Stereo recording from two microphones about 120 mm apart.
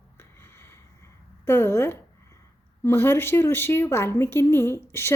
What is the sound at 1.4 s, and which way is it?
A woman's voice, 20° left (ahead or behind).